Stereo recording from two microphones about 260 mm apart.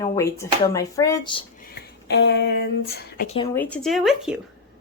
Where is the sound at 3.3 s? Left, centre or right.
Centre.